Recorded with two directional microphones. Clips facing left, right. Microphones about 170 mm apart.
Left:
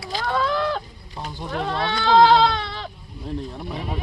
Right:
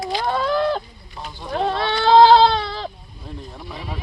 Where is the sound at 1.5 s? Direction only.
30° right (ahead or behind).